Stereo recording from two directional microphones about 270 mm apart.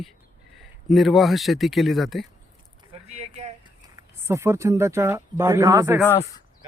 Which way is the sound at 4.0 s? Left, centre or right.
Centre.